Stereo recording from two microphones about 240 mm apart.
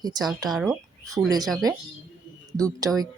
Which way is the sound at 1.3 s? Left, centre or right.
Centre.